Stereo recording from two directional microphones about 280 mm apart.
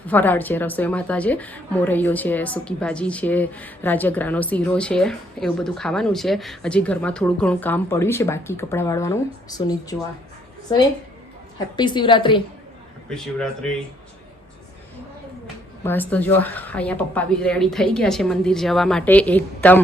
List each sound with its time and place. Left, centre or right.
0.1 s speech: centre
11.8 s a woman's voice: centre
13.1 s speech: centre
15.8 s speech: centre